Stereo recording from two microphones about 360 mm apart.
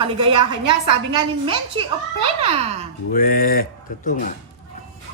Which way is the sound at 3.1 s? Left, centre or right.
Left.